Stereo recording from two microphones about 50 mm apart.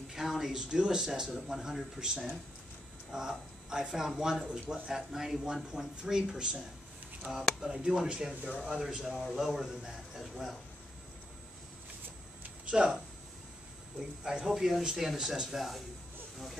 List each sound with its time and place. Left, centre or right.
0.1 s speech: centre
12.6 s speech: centre
13.9 s speech: centre